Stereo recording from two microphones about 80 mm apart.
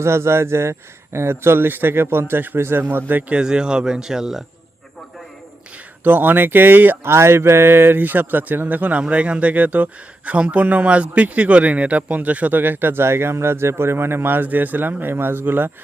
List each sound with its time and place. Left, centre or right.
0.0 s speech: right
3.3 s speech: centre
6.0 s speech: right